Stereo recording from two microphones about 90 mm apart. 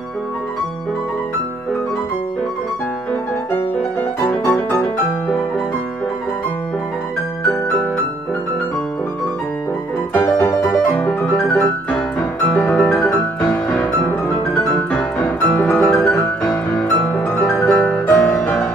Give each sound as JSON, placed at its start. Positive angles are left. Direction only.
{"t": 4.3, "sound": "music", "side_deg": 20}
{"t": 10.1, "sound": "music", "side_deg": 30}
{"t": 11.0, "sound": "music", "side_deg": 20}